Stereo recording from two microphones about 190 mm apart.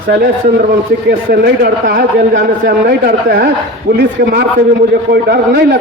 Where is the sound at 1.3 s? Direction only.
55° right (ahead or behind).